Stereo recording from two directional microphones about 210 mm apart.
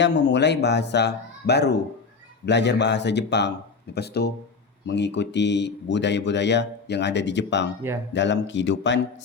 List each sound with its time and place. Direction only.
0.0 s speech: 55° left (ahead or behind)